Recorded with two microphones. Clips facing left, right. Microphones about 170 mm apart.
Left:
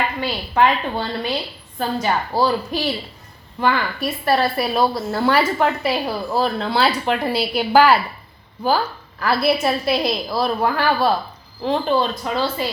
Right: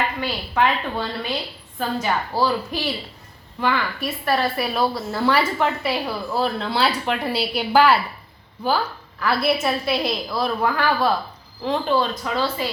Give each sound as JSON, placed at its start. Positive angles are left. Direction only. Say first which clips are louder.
{"t": 0.2, "sound": "a woman's voice", "louder": "left 6 dB", "side_deg": 35}